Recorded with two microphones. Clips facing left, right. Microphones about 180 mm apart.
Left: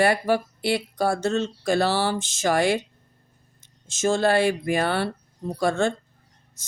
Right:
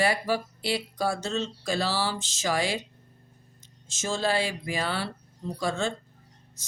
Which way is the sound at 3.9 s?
55° left (ahead or behind).